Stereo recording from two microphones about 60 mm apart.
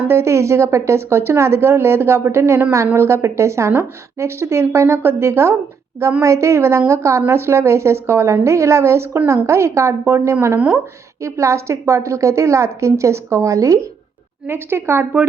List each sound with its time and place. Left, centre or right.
0.1 s a woman's voice: right
10.5 s a woman's voice: right
11.2 s a woman's voice: right
14.4 s a woman's voice: right